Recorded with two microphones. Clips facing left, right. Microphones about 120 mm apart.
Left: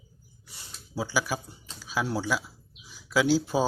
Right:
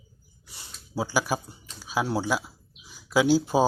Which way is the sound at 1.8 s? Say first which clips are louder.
Right 3 dB; 20° right (ahead or behind).